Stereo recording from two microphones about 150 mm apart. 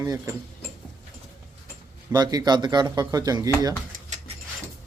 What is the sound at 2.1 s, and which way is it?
Speech, 25° right (ahead or behind).